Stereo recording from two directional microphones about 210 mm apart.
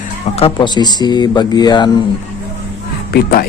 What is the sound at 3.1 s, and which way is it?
Speech, 45° left (ahead or behind).